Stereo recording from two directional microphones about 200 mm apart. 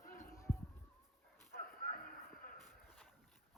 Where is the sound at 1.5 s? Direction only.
45° left (ahead or behind).